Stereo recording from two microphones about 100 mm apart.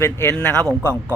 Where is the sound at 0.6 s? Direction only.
25° right (ahead or behind).